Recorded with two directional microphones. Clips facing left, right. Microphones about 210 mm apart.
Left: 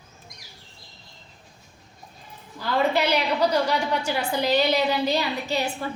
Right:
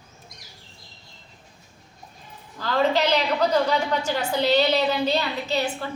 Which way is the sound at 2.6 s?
10° left (ahead or behind).